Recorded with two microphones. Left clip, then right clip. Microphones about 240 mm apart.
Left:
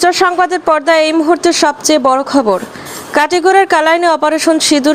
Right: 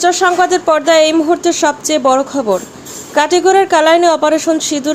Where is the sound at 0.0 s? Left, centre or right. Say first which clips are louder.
Left 1 dB; centre.